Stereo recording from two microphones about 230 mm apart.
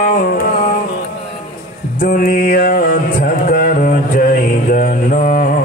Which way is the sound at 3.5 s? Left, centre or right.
Left.